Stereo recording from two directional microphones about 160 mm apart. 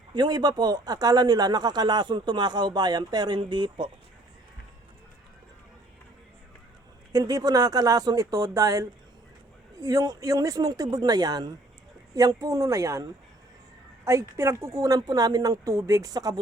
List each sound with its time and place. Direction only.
0.1 s a man's voice: 25° right (ahead or behind)
7.1 s a man's voice: 25° right (ahead or behind)